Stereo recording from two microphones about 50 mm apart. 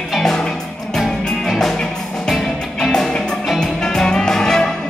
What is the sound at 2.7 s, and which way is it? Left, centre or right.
Music, centre.